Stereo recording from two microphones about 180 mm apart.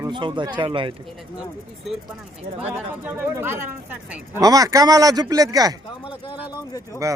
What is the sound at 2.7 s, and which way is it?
Speech, 10° right (ahead or behind).